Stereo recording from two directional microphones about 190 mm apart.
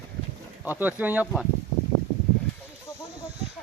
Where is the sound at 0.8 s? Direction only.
10° right (ahead or behind).